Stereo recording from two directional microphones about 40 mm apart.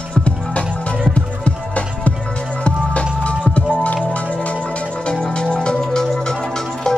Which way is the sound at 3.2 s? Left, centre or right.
Left.